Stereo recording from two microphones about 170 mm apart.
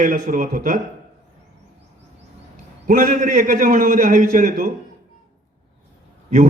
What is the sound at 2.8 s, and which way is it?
A man's voice, 50° right (ahead or behind).